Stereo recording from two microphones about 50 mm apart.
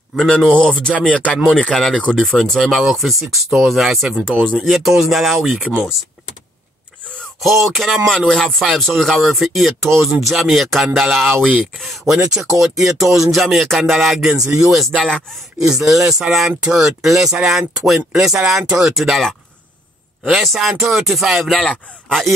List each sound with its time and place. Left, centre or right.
0.1 s speech: centre
0.5 s speech: left
1.6 s music: centre
2.1 s speech: centre
7.3 s speech: centre
8.1 s music: centre
8.7 s speech: centre
12.1 s speech: centre